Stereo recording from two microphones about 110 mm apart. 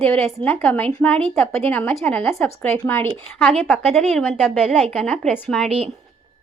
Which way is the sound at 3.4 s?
Centre (ahead or behind).